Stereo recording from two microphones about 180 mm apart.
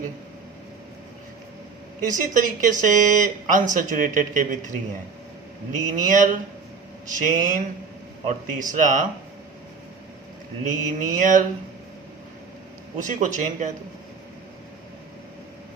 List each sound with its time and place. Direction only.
2.0 s speech: 45° right (ahead or behind)
5.7 s speech: 45° right (ahead or behind)
10.8 s speech: 45° right (ahead or behind)
13.0 s speech: 45° right (ahead or behind)